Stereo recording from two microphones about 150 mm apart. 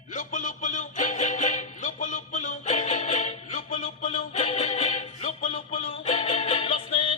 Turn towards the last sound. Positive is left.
turn(degrees=40)  # may be behind; listen again after turning